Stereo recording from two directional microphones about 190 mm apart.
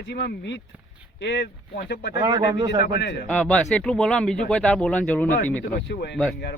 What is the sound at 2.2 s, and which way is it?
Speech, 20° right (ahead or behind).